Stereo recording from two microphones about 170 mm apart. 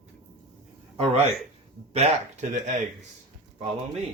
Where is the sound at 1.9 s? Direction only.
40° right (ahead or behind).